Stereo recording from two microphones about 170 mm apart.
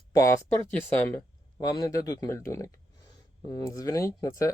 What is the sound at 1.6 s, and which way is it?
Speech, 20° left (ahead or behind).